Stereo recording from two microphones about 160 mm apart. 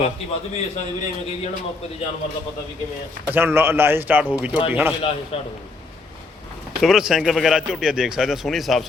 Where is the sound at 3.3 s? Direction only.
10° right (ahead or behind).